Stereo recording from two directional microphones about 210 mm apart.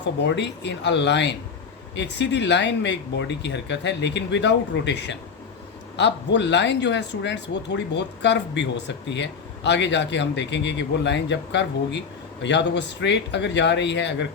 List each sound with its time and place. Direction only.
0.0 s speech: 55° left (ahead or behind)